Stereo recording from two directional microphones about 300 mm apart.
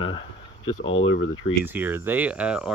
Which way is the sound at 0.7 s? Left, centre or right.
Left.